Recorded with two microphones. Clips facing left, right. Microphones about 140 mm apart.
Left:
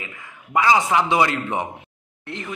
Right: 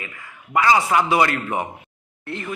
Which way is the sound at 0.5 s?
15° left (ahead or behind).